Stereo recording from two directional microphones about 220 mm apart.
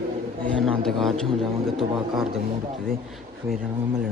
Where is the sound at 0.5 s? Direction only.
Centre (ahead or behind).